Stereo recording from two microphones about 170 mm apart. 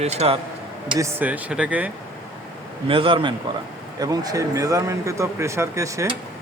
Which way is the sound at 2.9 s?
30° right (ahead or behind).